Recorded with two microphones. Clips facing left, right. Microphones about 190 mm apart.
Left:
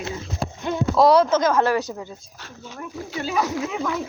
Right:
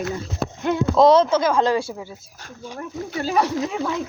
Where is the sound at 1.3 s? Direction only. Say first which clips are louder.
Even; 10° right (ahead or behind).